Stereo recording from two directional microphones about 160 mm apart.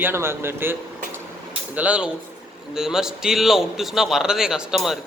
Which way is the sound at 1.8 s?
10° right (ahead or behind).